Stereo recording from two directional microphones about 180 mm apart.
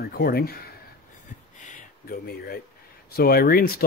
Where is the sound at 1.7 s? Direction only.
55° left (ahead or behind).